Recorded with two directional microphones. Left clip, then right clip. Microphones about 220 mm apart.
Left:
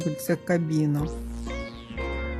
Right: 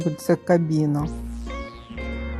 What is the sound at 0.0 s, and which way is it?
Speech, centre (ahead or behind).